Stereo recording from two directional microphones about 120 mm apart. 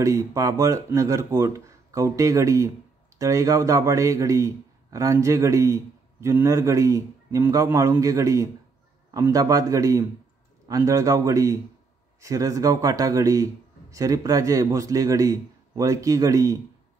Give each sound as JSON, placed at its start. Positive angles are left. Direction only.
{"t": 0.0, "sound": "speech", "side_deg": -25}